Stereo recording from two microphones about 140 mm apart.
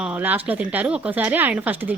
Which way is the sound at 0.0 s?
10° right (ahead or behind).